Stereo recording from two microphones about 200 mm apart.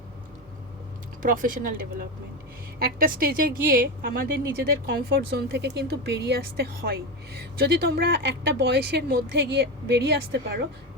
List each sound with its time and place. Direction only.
1.2 s a woman's voice: 40° right (ahead or behind)